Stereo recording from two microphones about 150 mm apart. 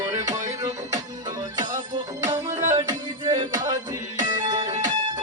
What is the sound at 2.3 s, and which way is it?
Music, 50° right (ahead or behind).